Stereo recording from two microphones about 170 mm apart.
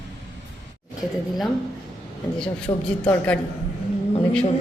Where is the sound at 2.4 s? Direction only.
5° left (ahead or behind).